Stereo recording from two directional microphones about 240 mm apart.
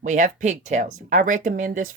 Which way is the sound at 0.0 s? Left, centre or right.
Right.